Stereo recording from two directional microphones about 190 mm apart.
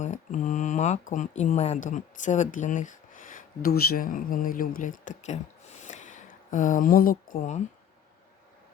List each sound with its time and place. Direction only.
0.0 s speech: 40° left (ahead or behind)
5.8 s a sound: 40° left (ahead or behind)
7.3 s speech: 35° left (ahead or behind)